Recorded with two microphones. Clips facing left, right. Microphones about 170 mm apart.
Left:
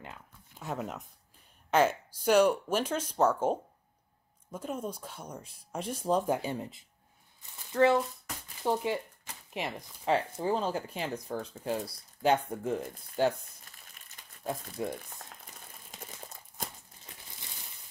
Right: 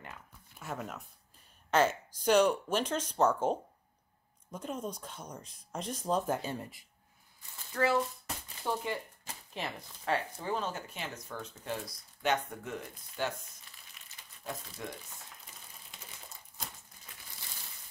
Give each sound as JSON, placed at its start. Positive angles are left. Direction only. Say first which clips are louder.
{"t": 0.0, "sound": "a sound", "louder": "left 2 dB", "side_deg": 20}
{"t": 1.7, "sound": "speech", "louder": "left 2 dB", "side_deg": 10}
{"t": 13.1, "sound": "speech", "louder": "left 8 dB", "side_deg": 45}
{"t": 14.8, "sound": "speech", "louder": "left 9 dB", "side_deg": 25}